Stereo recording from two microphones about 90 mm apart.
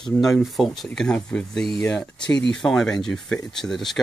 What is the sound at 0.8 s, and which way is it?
Speech, 10° left (ahead or behind).